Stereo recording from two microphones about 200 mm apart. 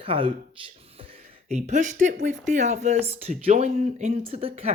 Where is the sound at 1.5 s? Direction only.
35° right (ahead or behind).